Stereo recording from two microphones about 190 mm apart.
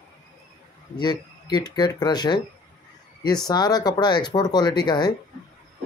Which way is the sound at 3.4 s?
20° left (ahead or behind).